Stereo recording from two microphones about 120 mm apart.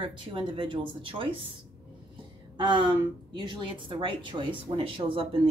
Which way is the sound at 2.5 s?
40° right (ahead or behind).